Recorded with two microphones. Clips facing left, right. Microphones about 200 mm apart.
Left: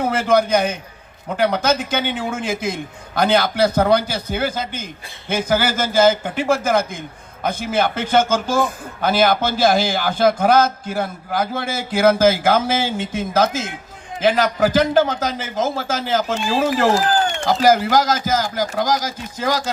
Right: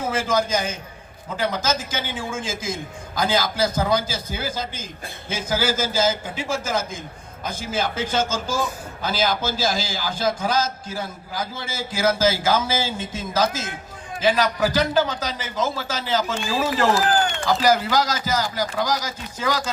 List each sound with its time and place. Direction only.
0.0 s a man's voice: 65° left (ahead or behind)